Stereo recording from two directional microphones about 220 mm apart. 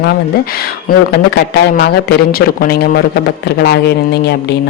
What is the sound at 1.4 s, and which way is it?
Speech, 45° left (ahead or behind).